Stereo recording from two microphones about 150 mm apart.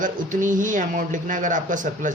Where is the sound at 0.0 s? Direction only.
60° right (ahead or behind).